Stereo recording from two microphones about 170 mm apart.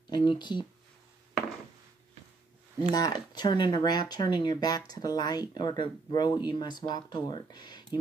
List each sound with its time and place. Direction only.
0.1 s speech: 25° left (ahead or behind)
2.9 s speech: 25° left (ahead or behind)